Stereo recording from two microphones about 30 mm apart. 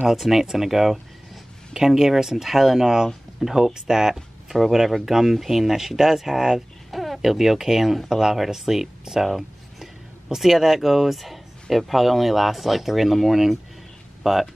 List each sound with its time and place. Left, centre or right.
0.1 s speech: centre
4.1 s speech: centre
6.9 s a sound: centre
7.2 s speech: centre
9.2 s speech: centre